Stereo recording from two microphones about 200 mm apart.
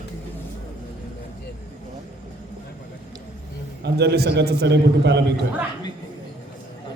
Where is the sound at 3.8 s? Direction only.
55° right (ahead or behind).